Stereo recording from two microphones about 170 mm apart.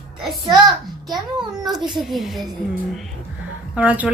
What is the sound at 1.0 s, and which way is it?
Speech, 25° right (ahead or behind).